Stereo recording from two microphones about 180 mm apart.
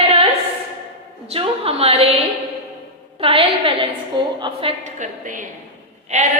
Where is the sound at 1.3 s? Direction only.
35° right (ahead or behind).